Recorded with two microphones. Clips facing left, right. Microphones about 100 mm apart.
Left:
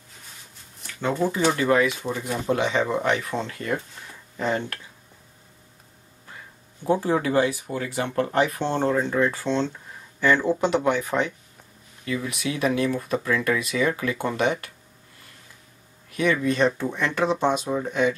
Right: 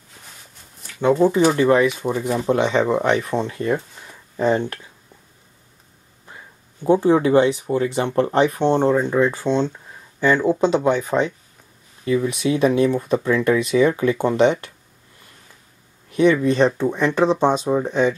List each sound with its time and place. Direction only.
1.1 s speech: 25° right (ahead or behind)
6.8 s speech: 20° right (ahead or behind)
16.1 s speech: 25° right (ahead or behind)